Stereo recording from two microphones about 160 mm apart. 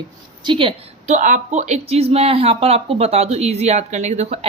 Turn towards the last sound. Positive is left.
turn(degrees=-45)  # may be behind; listen again after turning